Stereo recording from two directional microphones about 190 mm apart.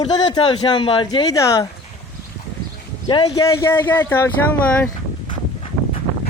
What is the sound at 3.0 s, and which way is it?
Speech, 25° left (ahead or behind).